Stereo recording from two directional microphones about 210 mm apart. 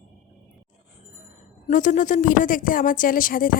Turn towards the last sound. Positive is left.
turn(degrees=40)  # may be behind; listen again after turning